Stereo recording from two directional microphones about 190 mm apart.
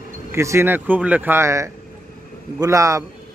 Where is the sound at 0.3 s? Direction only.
15° right (ahead or behind).